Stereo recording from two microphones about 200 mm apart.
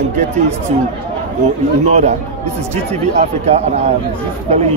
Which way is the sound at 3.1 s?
35° right (ahead or behind).